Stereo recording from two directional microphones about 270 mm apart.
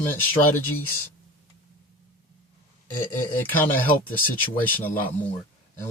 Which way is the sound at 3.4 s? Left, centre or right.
Centre.